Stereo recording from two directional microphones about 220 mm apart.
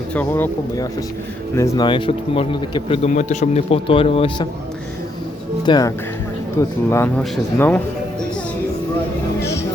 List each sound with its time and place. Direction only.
0.1 s speech: 10° left (ahead or behind); by 4.4 s 25° left (ahead or behind)
5.6 s speech: 20° left (ahead or behind)